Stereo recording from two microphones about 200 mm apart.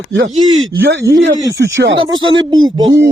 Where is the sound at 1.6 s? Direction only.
60° right (ahead or behind).